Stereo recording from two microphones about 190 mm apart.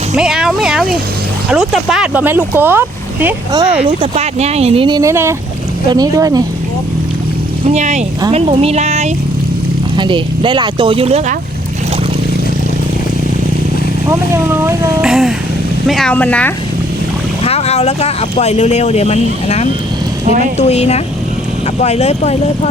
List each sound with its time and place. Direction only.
0.2 s speech: 5° right (ahead or behind)
3.8 s speech: 30° right (ahead or behind)
7.7 s speech: 35° right (ahead or behind)
10.0 s speech: 25° right (ahead or behind)
14.1 s speech: 15° right (ahead or behind)
15.0 s speech: centre (ahead or behind)
17.4 s speech: 35° left (ahead or behind)
20.2 s a woman's voice: 40° right (ahead or behind)
20.6 s speech: 35° left (ahead or behind)